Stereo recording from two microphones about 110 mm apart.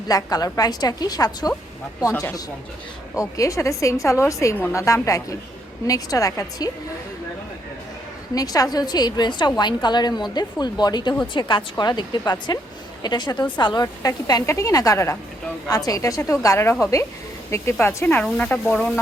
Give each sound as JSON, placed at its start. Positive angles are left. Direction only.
{"t": 0.1, "sound": "a woman's voice", "side_deg": 35}
{"t": 8.4, "sound": "a woman's voice", "side_deg": 35}